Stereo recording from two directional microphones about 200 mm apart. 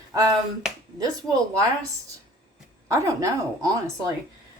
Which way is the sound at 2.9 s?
15° right (ahead or behind).